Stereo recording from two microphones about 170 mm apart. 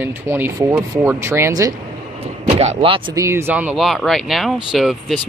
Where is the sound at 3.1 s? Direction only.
15° right (ahead or behind).